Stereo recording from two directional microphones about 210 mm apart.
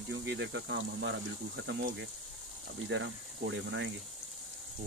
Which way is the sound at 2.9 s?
60° right (ahead or behind).